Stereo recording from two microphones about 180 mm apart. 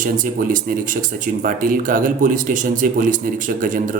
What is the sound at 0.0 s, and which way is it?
Speech, 50° right (ahead or behind).